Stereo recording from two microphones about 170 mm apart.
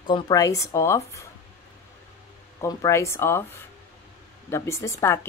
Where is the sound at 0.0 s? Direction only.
25° left (ahead or behind).